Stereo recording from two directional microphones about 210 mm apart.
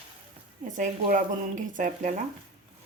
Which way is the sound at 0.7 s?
40° right (ahead or behind).